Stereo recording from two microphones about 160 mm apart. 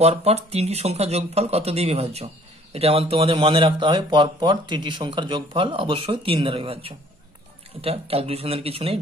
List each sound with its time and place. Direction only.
0.0 s speech: 40° right (ahead or behind)